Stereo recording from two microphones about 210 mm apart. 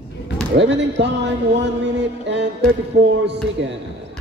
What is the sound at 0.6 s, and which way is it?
Speech, 55° right (ahead or behind).